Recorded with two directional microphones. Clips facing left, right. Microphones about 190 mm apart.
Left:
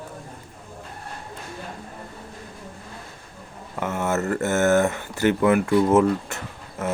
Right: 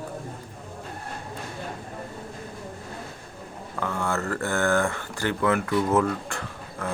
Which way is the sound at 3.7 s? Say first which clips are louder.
Left 4 dB; 20° left (ahead or behind).